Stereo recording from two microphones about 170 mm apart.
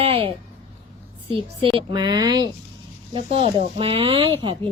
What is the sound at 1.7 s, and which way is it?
Speech, 25° right (ahead or behind).